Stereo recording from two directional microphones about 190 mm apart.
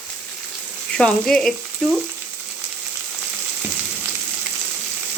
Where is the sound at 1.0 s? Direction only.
5° left (ahead or behind).